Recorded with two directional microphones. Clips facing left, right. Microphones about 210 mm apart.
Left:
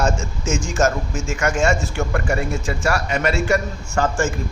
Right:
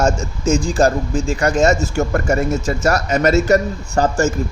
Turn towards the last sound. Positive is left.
turn(degrees=-40)  # may be behind; listen again after turning